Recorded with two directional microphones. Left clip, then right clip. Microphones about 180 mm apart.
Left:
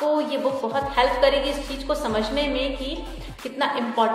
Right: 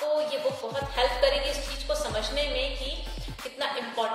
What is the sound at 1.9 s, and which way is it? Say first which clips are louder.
Music: left 5 dB; 10° right (ahead or behind).